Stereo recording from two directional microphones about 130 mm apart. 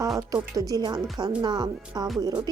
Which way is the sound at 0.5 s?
25° right (ahead or behind).